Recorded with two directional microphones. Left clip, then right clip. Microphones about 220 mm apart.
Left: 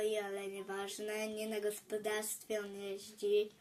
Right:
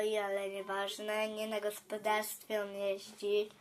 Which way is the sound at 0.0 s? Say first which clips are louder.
Right 3 dB; 25° left (ahead or behind).